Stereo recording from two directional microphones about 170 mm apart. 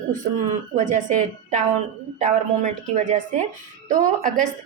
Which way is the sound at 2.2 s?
45° right (ahead or behind).